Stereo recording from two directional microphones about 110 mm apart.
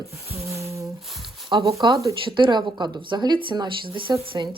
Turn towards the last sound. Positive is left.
turn(degrees=-40)  # may be behind; listen again after turning